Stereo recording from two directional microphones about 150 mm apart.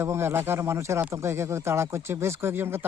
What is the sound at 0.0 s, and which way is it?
Speech, 15° right (ahead or behind).